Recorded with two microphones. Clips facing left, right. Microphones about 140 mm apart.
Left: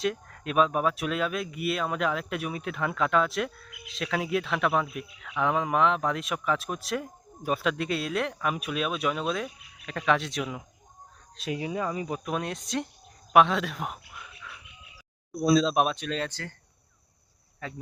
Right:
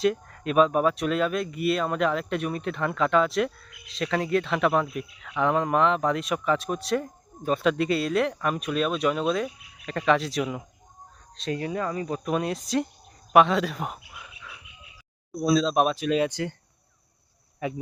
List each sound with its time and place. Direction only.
0.0 s speech: centre (ahead or behind)
11.3 s speech: 10° left (ahead or behind)
12.2 s speech: centre (ahead or behind)
13.3 s frog: centre (ahead or behind)
15.4 s speech: centre (ahead or behind); by 16.6 s 15° right (ahead or behind)
17.6 s speech: 15° right (ahead or behind)